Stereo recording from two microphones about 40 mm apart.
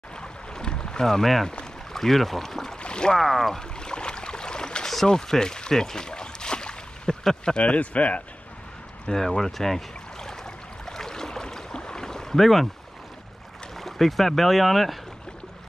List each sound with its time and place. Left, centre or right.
0.2 s boat: centre
1.0 s speech: centre
2.8 s boat: left
3.2 s speech: centre
3.5 s a sound: left
7.5 s speech: left
9.0 s a sound: centre
13.7 s speech: centre